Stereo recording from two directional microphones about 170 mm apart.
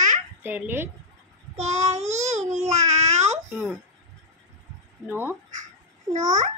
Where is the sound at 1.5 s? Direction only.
40° right (ahead or behind).